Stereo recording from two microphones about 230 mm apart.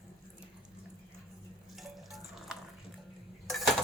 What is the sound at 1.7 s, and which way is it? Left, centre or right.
Water tap, centre.